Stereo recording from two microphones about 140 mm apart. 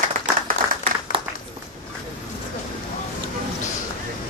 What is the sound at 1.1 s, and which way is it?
Applause, 70° left (ahead or behind).